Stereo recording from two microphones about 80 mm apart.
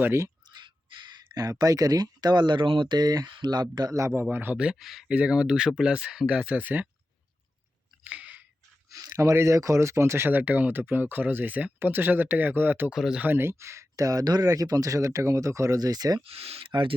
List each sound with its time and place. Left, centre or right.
0.4 s a sound: right
1.5 s speech: right
3.0 s speech: right
3.9 s speech: right
4.2 s speech: right
4.5 s speech: centre
5.1 s speech: centre
8.0 s chewing: centre
8.9 s a sound: right
9.1 s speech: right
12.9 s speech: centre
13.2 s speech: right
13.9 s speech: right